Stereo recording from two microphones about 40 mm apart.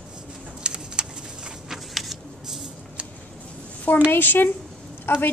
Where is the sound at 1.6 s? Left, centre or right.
Centre.